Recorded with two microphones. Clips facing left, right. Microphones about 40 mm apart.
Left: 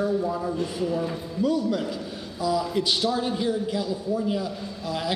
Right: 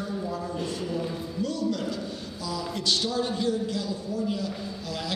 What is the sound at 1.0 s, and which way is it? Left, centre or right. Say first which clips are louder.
A man's voice: left 4 dB; centre.